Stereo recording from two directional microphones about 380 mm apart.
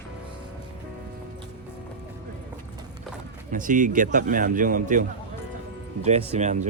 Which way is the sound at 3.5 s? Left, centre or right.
Right.